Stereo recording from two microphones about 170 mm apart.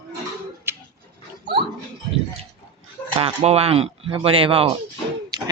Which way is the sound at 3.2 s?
35° right (ahead or behind).